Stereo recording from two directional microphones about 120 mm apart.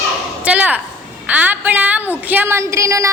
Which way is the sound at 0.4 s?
10° right (ahead or behind).